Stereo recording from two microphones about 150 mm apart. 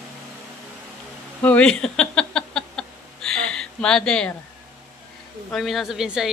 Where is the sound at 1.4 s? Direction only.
10° left (ahead or behind).